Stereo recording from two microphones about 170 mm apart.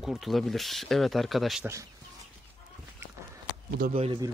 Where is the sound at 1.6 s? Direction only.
15° right (ahead or behind).